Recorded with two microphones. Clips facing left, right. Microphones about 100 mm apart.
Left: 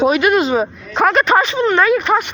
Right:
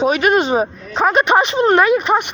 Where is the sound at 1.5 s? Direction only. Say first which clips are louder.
Right 1 dB; 50° right (ahead or behind).